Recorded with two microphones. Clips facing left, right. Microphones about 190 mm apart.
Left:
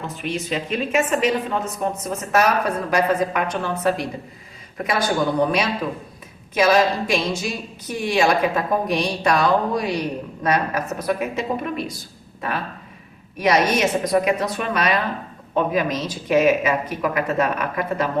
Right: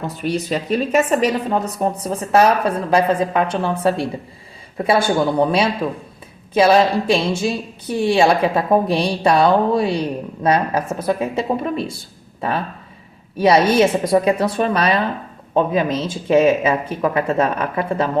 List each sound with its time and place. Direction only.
0.1 s a woman's voice: 40° right (ahead or behind)